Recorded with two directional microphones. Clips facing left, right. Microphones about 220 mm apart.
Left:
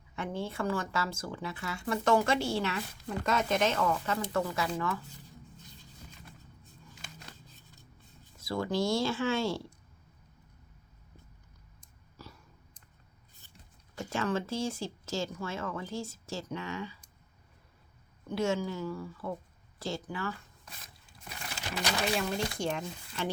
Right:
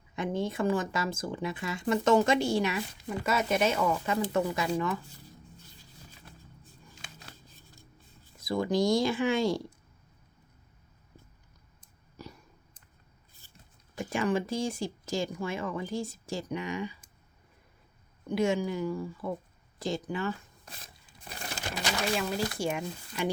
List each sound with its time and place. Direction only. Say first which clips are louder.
0.2 s speech: right 5 dB; 15° right (ahead or behind)
7.5 s scissors: right 2 dB; 10° right (ahead or behind)
8.4 s speech: right 4 dB; 15° right (ahead or behind)
12.1 s a sound: right 5 dB; 15° right (ahead or behind)
13.9 s speech: right 3 dB; 15° right (ahead or behind)
18.3 s speech: right 3 dB; 15° right (ahead or behind)
21.3 s crumpling: right 4 dB; 40° right (ahead or behind)
22.2 s speech: right 2 dB; 5° right (ahead or behind)